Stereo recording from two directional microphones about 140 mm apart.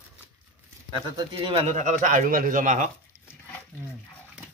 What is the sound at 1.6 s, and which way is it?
Speech, 60° right (ahead or behind).